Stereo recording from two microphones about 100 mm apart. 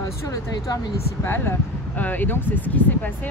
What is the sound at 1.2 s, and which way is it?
Speech, 20° left (ahead or behind).